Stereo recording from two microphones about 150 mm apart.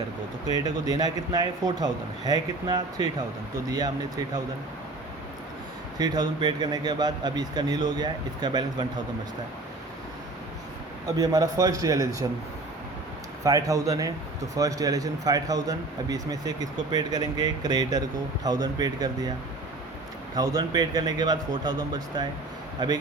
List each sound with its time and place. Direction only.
0.4 s speech: 25° right (ahead or behind)
6.0 s speech: 25° right (ahead or behind)
11.2 s speech: 25° right (ahead or behind)
13.4 s speech: 25° right (ahead or behind)
20.3 s speech: 25° right (ahead or behind)